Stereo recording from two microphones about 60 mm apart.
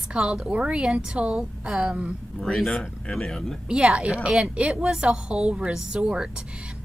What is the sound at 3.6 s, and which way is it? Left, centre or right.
A woman's voice, centre.